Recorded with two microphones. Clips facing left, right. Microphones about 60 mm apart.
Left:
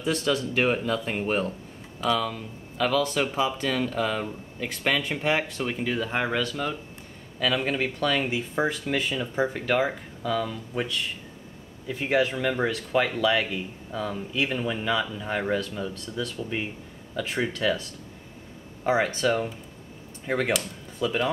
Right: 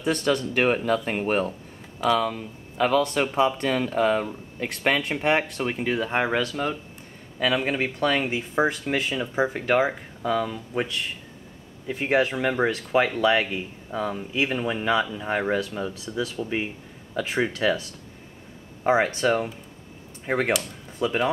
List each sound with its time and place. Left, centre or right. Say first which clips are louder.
0.0 s speech: right 2 dB; centre
3.3 s speech: right 4 dB; centre
3.7 s speech: right 4 dB; centre
4.8 s speech: right 3 dB; centre
10.9 s speech: even; centre